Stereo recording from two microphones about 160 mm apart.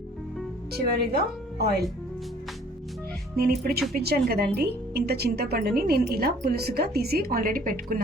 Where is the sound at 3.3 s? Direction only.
75° right (ahead or behind).